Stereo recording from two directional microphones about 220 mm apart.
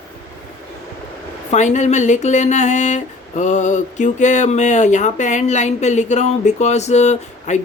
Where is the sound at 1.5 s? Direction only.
35° left (ahead or behind).